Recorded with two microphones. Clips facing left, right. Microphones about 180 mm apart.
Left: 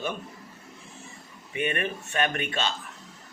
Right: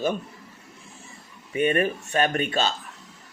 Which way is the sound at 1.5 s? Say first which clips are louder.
Right 7 dB; 40° right (ahead or behind).